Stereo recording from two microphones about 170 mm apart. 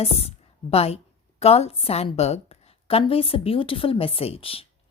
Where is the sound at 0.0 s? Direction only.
35° left (ahead or behind).